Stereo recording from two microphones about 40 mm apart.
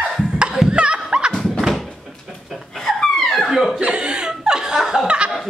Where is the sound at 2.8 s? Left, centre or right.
Centre.